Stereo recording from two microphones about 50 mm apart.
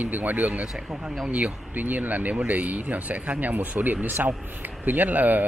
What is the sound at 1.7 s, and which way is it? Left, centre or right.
Speech, right.